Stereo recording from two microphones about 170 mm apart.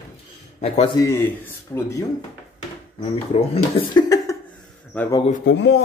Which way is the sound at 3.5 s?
30° left (ahead or behind).